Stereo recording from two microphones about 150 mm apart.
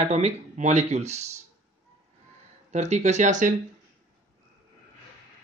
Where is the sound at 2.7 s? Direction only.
50° right (ahead or behind).